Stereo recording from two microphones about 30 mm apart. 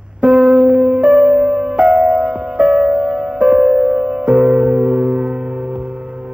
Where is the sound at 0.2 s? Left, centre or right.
Right.